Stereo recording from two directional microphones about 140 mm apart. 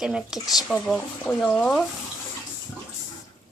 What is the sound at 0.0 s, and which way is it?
Speech, 5° right (ahead or behind).